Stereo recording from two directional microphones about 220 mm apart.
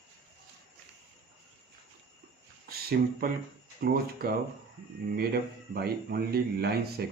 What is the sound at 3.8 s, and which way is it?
Speech, 45° right (ahead or behind).